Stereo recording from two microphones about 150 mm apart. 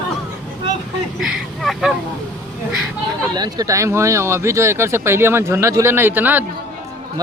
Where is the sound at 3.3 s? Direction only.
25° right (ahead or behind).